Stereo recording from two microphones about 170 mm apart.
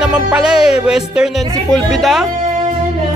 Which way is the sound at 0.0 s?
5° right (ahead or behind).